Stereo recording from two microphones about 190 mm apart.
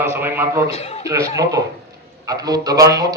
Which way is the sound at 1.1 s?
15° right (ahead or behind).